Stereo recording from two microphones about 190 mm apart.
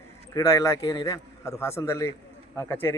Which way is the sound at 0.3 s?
15° left (ahead or behind).